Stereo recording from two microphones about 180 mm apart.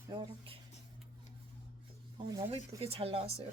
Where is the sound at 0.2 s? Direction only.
30° right (ahead or behind).